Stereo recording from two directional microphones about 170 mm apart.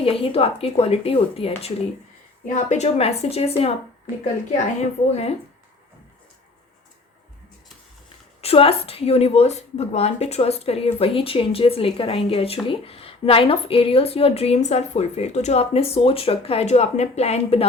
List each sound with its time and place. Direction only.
0.0 s a woman's voice: 35° left (ahead or behind)
8.4 s a woman's voice: 35° left (ahead or behind)